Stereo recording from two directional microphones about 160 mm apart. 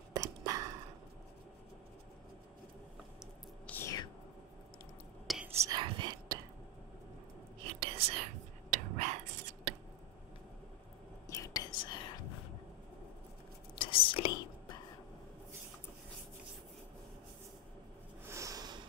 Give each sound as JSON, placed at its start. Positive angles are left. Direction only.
{"t": 0.1, "sound": "a sound", "side_deg": -20}
{"t": 3.6, "sound": "whispering", "side_deg": 10}
{"t": 5.2, "sound": "whispering", "side_deg": 0}
{"t": 5.7, "sound": "whispering", "side_deg": -30}
{"t": 7.6, "sound": "whispering", "side_deg": -40}
{"t": 8.1, "sound": "whispering", "side_deg": -50}
{"t": 11.2, "sound": "whispering", "side_deg": 20}
{"t": 13.7, "sound": "whispering", "side_deg": 35}
{"t": 18.2, "sound": "a sound", "side_deg": -20}